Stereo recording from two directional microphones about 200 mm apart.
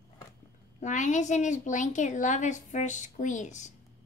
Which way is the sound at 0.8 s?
40° left (ahead or behind).